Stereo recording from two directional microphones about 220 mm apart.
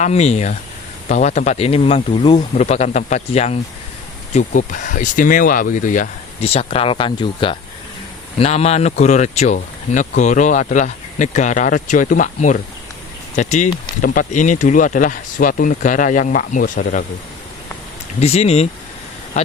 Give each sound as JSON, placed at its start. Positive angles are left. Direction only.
{"t": 0.0, "sound": "speech", "side_deg": 30}
{"t": 18.2, "sound": "speech", "side_deg": 30}